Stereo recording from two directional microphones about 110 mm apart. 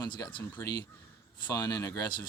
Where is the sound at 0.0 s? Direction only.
40° left (ahead or behind).